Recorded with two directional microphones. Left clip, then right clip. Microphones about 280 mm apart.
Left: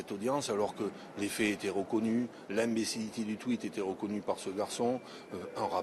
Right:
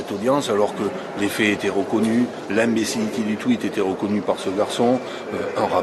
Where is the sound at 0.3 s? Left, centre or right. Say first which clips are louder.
Right 13 dB; right.